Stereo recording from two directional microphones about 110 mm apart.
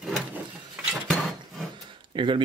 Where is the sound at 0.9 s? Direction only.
Centre (ahead or behind).